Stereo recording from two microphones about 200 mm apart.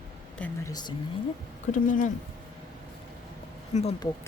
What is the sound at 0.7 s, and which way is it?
Speech, 20° left (ahead or behind).